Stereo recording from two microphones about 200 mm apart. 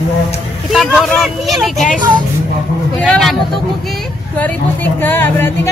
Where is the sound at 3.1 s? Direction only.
Centre (ahead or behind).